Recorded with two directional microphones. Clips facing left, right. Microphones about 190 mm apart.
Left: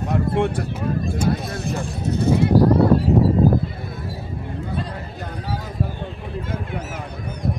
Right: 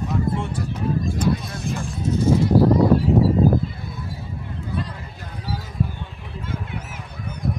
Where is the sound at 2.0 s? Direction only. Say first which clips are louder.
Even; 65° left (ahead or behind).